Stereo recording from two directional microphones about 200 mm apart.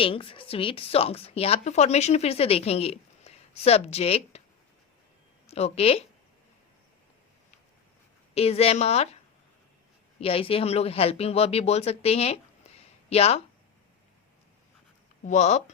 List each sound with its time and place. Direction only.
0.0 s speech: 25° left (ahead or behind)
5.5 s speech: 30° left (ahead or behind)
8.4 s speech: 30° left (ahead or behind)
10.2 s speech: 30° left (ahead or behind)
15.2 s speech: 35° left (ahead or behind)